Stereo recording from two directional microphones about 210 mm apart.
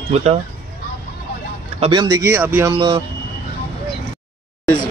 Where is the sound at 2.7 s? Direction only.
20° right (ahead or behind).